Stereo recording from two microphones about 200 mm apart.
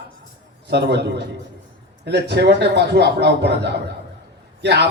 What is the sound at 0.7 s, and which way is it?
A man's voice, 55° right (ahead or behind).